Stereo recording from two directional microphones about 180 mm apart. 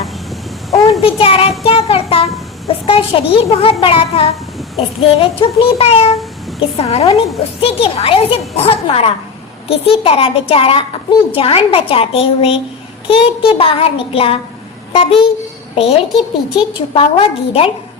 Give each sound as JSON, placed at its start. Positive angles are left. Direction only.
{"t": 1.0, "sound": "a child's voice", "side_deg": 30}